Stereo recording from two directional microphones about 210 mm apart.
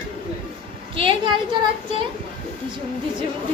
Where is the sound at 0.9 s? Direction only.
25° right (ahead or behind).